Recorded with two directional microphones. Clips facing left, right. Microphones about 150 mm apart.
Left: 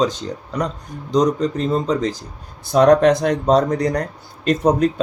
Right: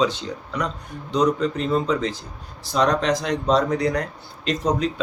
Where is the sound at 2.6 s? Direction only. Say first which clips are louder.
Left 8 dB; 50° left (ahead or behind).